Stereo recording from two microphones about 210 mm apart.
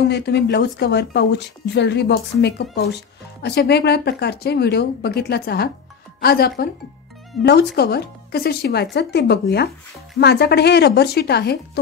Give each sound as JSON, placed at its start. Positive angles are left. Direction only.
{"t": 0.1, "sound": "speech", "side_deg": 50}